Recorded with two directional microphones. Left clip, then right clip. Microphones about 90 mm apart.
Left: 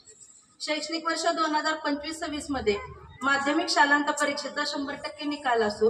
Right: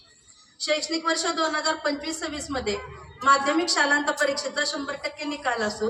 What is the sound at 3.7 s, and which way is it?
A woman's voice, 20° right (ahead or behind).